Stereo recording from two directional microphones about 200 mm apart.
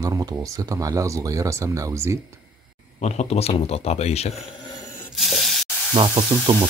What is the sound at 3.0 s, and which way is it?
Speech, 35° left (ahead or behind).